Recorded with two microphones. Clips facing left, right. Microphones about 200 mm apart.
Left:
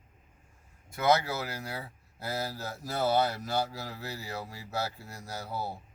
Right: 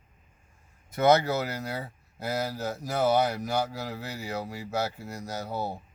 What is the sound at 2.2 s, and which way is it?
Speech, 15° right (ahead or behind).